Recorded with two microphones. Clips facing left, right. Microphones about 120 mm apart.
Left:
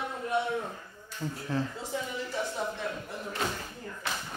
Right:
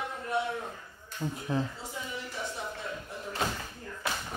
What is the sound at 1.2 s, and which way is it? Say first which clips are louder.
Speech: right 1 dB; 15° right (ahead or behind).